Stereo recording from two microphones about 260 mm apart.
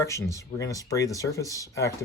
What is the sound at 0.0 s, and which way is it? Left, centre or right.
Speech, centre.